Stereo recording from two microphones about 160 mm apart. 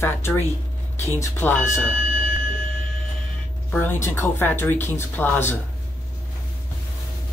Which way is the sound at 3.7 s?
10° left (ahead or behind).